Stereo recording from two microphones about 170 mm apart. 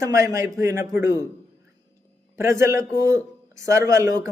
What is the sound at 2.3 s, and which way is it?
A man's voice, 15° right (ahead or behind).